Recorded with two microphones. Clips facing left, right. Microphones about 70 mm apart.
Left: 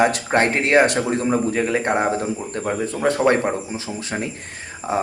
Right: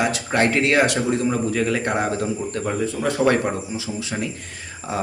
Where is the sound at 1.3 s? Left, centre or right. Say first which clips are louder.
Left 2 dB; left.